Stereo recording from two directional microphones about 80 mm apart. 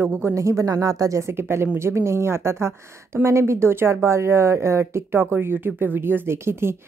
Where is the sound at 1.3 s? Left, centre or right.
Right.